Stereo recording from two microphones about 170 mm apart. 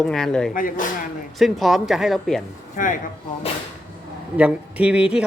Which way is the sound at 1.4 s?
Centre (ahead or behind).